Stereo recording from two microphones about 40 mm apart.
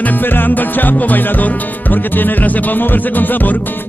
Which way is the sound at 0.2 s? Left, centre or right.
Left.